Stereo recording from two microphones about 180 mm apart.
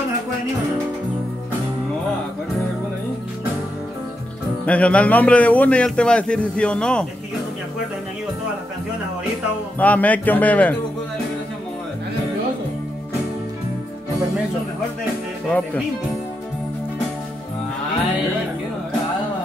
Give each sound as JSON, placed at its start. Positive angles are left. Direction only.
{"t": 4.6, "sound": "a man's voice", "side_deg": 5}
{"t": 9.8, "sound": "a man's voice", "side_deg": 10}